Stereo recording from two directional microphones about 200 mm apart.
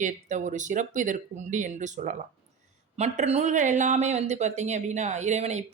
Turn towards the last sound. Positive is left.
turn(degrees=-35)  # may be behind; listen again after turning